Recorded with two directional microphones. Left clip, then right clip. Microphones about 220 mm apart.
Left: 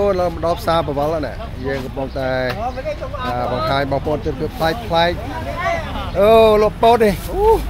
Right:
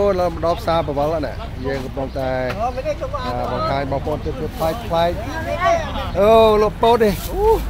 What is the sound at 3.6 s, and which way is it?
Speech, 20° left (ahead or behind).